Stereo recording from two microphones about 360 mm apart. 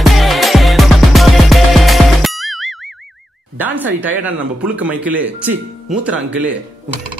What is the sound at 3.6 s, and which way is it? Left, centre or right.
Speech, centre.